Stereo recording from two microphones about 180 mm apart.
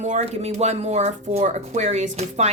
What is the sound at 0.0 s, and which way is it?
Speech, 40° right (ahead or behind).